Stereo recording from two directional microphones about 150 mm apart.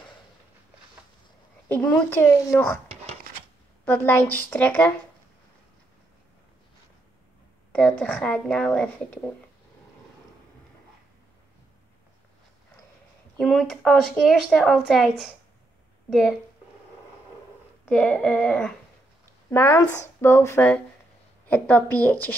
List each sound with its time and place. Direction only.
1.7 s speech: 10° left (ahead or behind)
2.9 s a sound: 45° right (ahead or behind)
3.8 s speech: 15° left (ahead or behind)
7.7 s speech: 5° left (ahead or behind)
13.4 s speech: centre (ahead or behind)
17.8 s speech: 5° left (ahead or behind)
19.5 s speech: 15° left (ahead or behind)